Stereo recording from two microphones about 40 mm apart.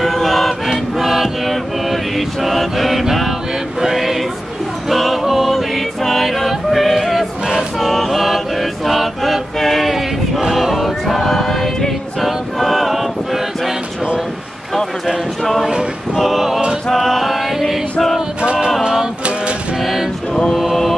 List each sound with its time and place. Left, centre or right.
0.0 s choir: centre
0.9 s mantra: centre
3.8 s a sound: centre
4.8 s music: centre
7.8 s chant: centre
12.2 s a sound: centre
16.2 s choir: centre
16.9 s a sound: centre
18.4 s music: right
19.8 s choir: centre
20.5 s mantra: centre